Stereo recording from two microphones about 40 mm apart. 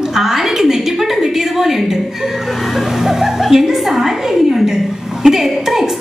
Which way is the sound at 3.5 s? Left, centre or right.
Centre.